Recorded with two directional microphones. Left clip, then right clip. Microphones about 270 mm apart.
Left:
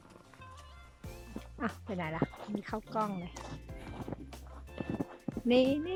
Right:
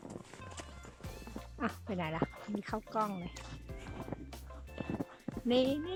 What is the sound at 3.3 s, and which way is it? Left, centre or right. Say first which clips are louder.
Music: left 4 dB; left.